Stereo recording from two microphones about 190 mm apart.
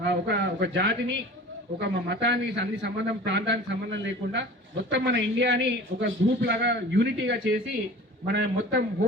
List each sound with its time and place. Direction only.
0.0 s a man's voice: 65° right (ahead or behind)
8.3 s a man's voice: 60° right (ahead or behind)